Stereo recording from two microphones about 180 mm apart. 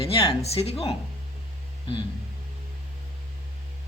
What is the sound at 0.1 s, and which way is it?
Speech, 35° left (ahead or behind).